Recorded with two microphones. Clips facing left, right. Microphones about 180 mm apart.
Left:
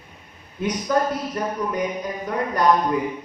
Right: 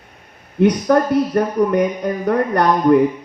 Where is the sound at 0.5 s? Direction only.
65° right (ahead or behind).